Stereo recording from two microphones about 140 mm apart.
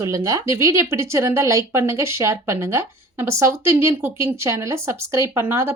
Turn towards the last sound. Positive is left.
turn(degrees=-15)  # may be behind; listen again after turning